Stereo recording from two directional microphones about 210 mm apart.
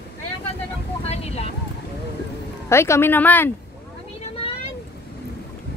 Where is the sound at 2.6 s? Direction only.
15° left (ahead or behind).